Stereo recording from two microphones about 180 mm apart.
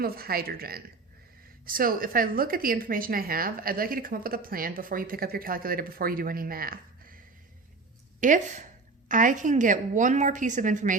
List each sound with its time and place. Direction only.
0.0 s a woman's voice: 55° right (ahead or behind)
8.2 s a woman's voice: 45° right (ahead or behind)